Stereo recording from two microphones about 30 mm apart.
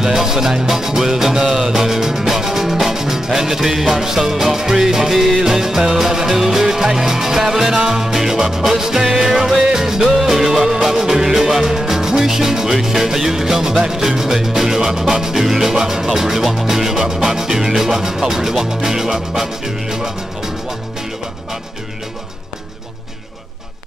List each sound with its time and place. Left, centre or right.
0.0 s music: centre